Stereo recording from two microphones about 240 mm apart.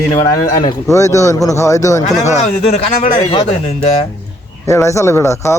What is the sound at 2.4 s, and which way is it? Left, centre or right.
A man's voice, left.